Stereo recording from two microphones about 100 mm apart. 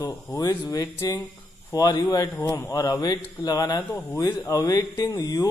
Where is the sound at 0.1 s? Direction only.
30° left (ahead or behind).